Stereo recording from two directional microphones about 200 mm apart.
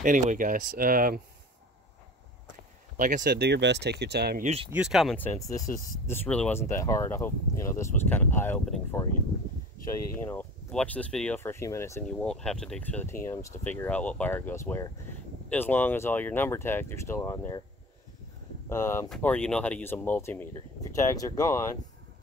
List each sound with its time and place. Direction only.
0.0 s speech: 40° right (ahead or behind)
3.2 s speech: 55° right (ahead or behind)
4.6 s speech: 5° right (ahead or behind)
9.8 s speech: 10° left (ahead or behind)
12.1 s speech: 5° left (ahead or behind)
18.7 s speech: 15° left (ahead or behind)